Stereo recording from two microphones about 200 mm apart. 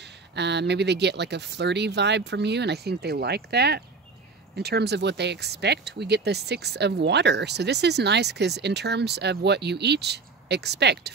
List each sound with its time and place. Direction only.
0.0 s speech: 60° right (ahead or behind)